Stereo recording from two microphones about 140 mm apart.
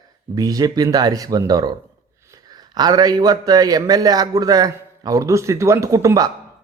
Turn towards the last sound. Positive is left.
turn(degrees=-25)  # may be behind; listen again after turning